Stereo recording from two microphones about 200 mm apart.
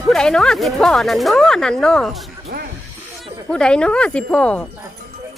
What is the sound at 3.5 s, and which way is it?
Speech, 5° left (ahead or behind).